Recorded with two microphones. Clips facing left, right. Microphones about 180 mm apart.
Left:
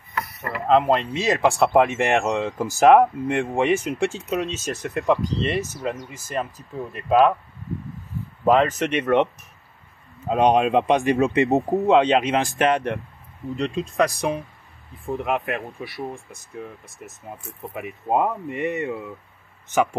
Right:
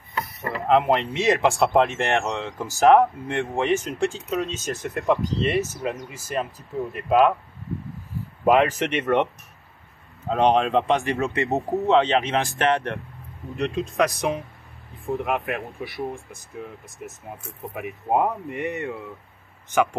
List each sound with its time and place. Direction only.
0.1 s a sound: 25° right (ahead or behind)
0.7 s speech: 5° right (ahead or behind)
2.0 s speech: 15° left (ahead or behind); by 5.7 s centre (ahead or behind)
7.1 s speech: centre (ahead or behind)
8.5 s speech: 10° right (ahead or behind)
8.9 s speech: centre (ahead or behind)
10.2 s speech: 15° left (ahead or behind)
13.9 s speech: centre (ahead or behind)
17.7 s speech: centre (ahead or behind)